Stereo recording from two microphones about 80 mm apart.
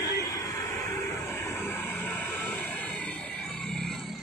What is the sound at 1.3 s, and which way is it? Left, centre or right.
Vehicle, left.